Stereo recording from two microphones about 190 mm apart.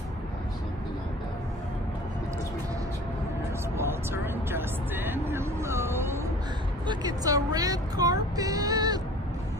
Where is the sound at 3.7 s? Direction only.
10° right (ahead or behind).